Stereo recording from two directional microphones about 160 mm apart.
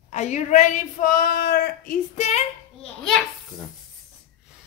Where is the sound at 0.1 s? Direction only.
50° left (ahead or behind); by 2.0 s 65° left (ahead or behind).